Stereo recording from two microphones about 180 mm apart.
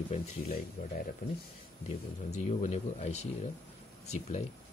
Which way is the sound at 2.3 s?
40° left (ahead or behind).